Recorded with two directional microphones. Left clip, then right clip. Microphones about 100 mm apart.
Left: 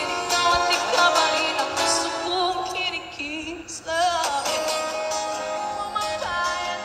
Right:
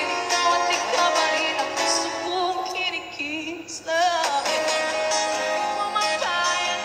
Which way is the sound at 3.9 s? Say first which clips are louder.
Right 1 dB; 25° left (ahead or behind).